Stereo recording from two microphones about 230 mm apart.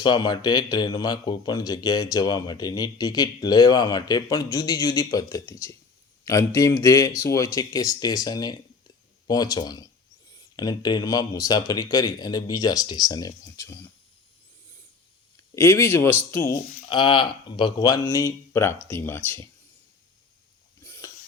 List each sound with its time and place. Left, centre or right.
0.0 s speech: centre
15.5 s speech: centre
20.8 s a sound: centre